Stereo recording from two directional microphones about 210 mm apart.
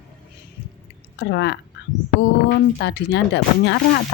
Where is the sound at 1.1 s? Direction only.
55° left (ahead or behind).